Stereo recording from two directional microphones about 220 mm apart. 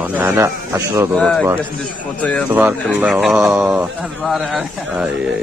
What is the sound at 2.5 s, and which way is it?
Speech, 10° right (ahead or behind).